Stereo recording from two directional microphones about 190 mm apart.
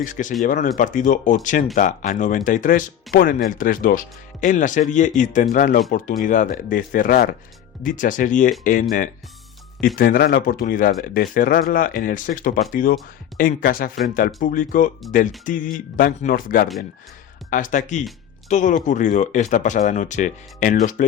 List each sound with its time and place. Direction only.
0.0 s speech: 45° left (ahead or behind)